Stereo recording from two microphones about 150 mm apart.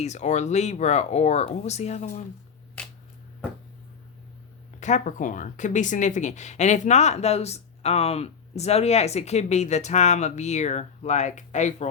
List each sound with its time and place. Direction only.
0.0 s speech: 50° left (ahead or behind)
2.8 s a sound: 10° left (ahead or behind)
4.8 s speech: 55° left (ahead or behind)